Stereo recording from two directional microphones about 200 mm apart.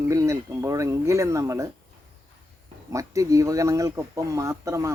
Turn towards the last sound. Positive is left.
turn(degrees=-15)  # may be behind; listen again after turning